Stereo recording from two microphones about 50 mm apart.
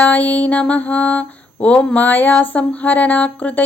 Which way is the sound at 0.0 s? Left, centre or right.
Left.